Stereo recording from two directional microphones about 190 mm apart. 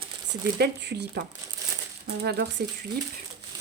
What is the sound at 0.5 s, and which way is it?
Speech, 60° right (ahead or behind).